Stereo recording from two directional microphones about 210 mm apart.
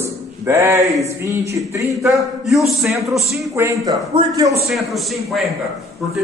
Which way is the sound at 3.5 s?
15° right (ahead or behind).